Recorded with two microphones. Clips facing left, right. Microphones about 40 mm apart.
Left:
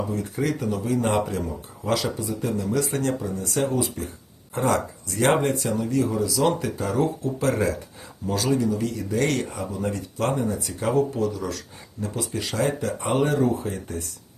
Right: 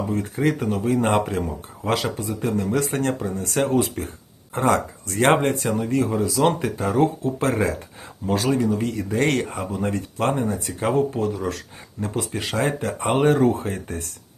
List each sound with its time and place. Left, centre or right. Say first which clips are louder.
0.1 s speech: right 4 dB; right